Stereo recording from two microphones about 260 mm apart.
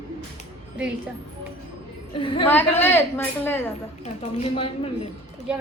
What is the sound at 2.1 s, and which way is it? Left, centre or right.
Speech, centre.